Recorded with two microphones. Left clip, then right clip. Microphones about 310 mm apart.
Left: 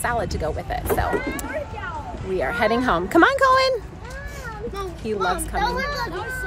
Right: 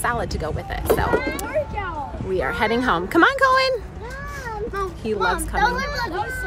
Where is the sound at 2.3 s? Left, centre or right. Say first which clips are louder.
Even; centre.